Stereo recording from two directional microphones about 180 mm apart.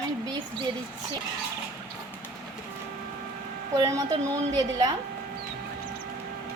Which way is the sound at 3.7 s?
20° right (ahead or behind).